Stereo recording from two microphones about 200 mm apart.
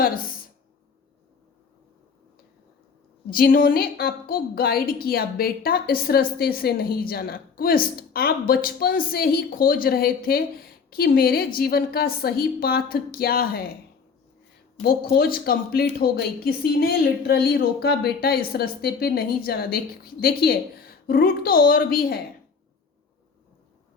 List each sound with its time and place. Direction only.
0.0 s a sound: 45° left (ahead or behind)
3.2 s speech: 45° left (ahead or behind)
14.8 s speech: 50° left (ahead or behind)